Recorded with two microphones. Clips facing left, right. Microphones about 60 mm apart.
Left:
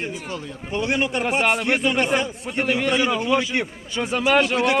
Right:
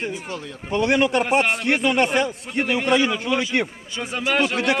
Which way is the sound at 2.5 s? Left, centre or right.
Centre.